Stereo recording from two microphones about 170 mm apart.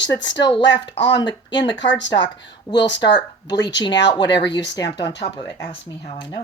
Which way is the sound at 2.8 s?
90° left.